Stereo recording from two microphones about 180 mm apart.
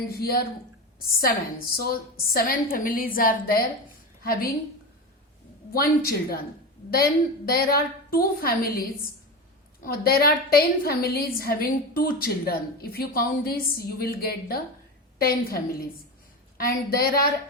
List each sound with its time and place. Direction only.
0.1 s a woman's voice: 60° left (ahead or behind)
5.7 s a woman's voice: 55° left (ahead or behind)
9.8 s a woman's voice: 60° left (ahead or behind)